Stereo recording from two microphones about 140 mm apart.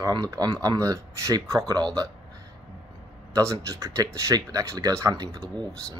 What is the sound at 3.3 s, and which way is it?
Speech, 20° right (ahead or behind).